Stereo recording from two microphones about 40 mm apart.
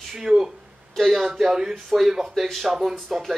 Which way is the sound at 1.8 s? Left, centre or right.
Centre.